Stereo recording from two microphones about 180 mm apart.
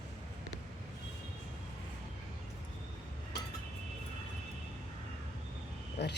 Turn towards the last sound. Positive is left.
turn(degrees=70)  # may be behind; listen again after turning